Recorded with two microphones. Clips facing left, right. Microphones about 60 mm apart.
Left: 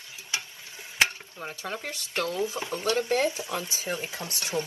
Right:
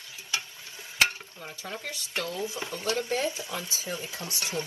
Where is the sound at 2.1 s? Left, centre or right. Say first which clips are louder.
Left 4 dB; left.